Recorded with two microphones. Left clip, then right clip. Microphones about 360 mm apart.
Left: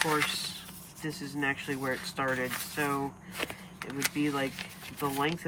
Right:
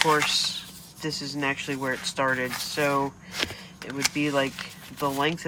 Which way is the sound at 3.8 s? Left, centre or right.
Centre.